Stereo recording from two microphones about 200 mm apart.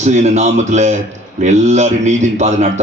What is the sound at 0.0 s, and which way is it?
A man's voice, 35° right (ahead or behind).